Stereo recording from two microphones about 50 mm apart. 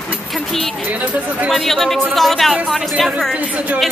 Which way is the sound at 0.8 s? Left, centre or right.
Right.